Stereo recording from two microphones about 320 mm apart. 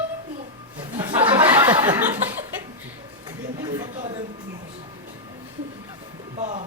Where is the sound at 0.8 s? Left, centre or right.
Centre.